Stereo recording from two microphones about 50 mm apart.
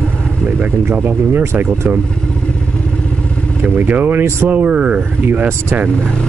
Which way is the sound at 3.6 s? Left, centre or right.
Right.